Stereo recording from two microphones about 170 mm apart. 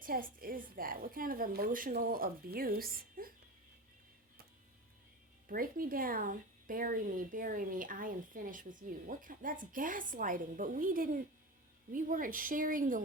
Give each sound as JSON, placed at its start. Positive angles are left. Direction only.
{"t": 0.0, "sound": "a woman's voice", "side_deg": -55}
{"t": 5.5, "sound": "speech", "side_deg": -55}